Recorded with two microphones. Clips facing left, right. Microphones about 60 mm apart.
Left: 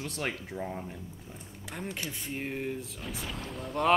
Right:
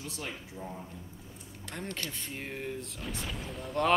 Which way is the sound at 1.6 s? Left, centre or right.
Centre.